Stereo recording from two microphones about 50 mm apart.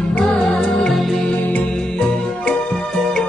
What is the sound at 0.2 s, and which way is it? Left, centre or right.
Music, centre.